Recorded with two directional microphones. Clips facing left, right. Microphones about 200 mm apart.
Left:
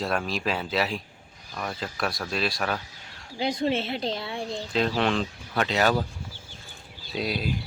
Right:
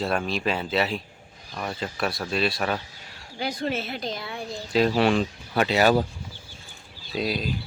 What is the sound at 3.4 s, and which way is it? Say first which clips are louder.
A woman's voice: left 3 dB; 25° left (ahead or behind).